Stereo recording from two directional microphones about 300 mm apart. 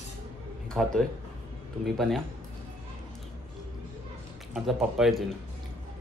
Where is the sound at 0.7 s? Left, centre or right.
Centre.